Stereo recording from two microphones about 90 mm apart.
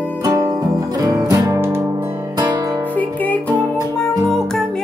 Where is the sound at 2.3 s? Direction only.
45° right (ahead or behind).